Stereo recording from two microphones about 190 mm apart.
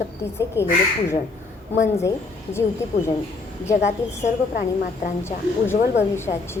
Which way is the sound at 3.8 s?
35° left (ahead or behind).